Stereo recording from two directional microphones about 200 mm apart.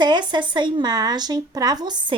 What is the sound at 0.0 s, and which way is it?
A woman's voice, 20° right (ahead or behind).